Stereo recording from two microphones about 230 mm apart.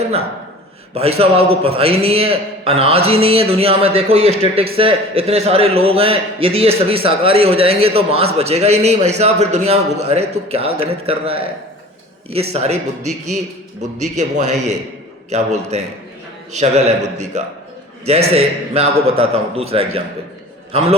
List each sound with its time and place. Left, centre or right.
0.9 s a man's voice: right
14.0 s a man's voice: right